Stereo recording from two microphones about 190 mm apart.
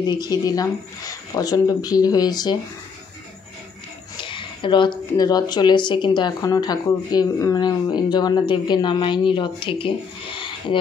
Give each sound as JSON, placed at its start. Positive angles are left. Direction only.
{"t": 0.0, "sound": "speech", "side_deg": 20}
{"t": 4.2, "sound": "speech", "side_deg": 25}